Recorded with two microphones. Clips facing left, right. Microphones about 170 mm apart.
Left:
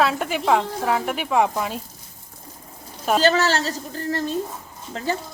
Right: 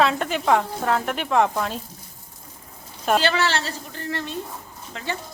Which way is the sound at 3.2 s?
40° left (ahead or behind).